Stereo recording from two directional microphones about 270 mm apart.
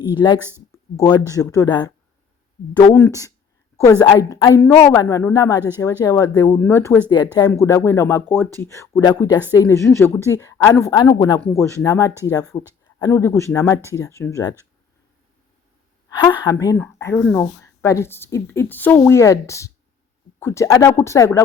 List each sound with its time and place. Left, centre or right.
0.1 s speech: centre
0.3 s speech: centre
0.9 s speech: centre
2.9 s speech: centre
16.1 s speech: centre